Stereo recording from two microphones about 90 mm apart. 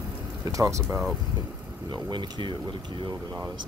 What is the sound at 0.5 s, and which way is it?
Speech, 35° right (ahead or behind).